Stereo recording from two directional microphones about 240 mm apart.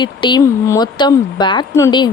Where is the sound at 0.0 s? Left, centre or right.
Centre.